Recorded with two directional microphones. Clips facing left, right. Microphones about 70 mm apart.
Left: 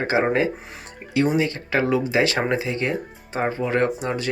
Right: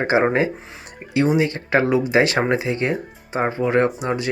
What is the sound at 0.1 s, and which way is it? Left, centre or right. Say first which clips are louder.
Speech: right 3 dB; right.